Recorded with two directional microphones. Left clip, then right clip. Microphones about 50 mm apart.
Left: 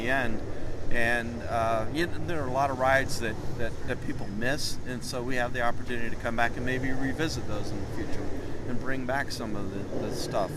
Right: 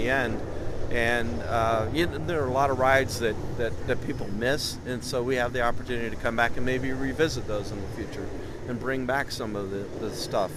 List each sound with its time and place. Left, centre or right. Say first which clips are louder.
0.0 s speech: right 3 dB; centre
6.7 s speech: right 2 dB; centre
8.9 s speech: right 3 dB; right